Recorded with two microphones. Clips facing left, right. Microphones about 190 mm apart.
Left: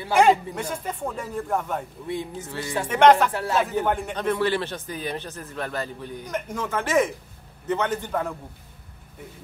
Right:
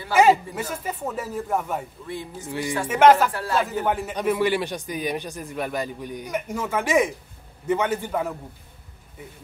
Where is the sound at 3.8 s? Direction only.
5° right (ahead or behind).